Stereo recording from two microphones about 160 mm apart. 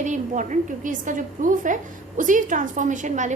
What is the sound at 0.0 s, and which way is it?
A woman's voice, 50° right (ahead or behind).